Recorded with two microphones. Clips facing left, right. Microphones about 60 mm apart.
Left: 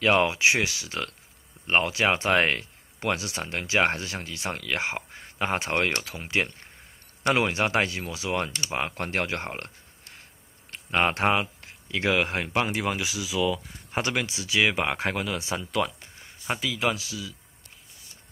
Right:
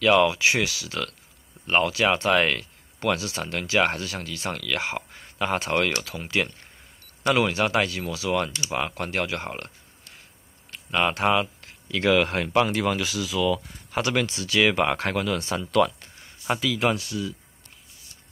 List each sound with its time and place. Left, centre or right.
0.0 s speech: left
10.7 s speech: left; by 17.3 s centre